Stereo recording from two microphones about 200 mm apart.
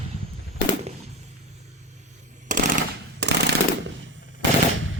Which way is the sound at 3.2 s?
60° right (ahead or behind).